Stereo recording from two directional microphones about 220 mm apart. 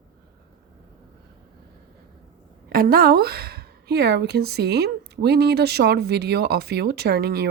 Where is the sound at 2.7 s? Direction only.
40° right (ahead or behind).